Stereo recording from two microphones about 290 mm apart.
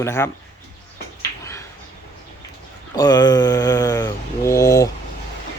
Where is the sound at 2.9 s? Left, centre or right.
Centre.